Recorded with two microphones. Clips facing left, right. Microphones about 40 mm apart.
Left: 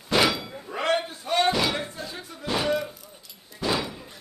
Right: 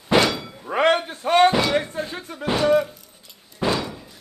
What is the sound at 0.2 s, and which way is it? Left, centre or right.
Thunk, centre.